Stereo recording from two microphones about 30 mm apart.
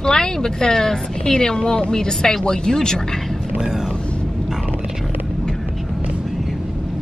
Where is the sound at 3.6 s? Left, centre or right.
Centre.